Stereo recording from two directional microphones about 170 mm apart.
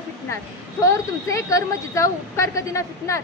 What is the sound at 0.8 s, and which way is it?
A woman's voice, 20° left (ahead or behind).